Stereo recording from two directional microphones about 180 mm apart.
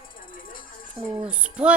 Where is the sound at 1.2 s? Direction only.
5° right (ahead or behind).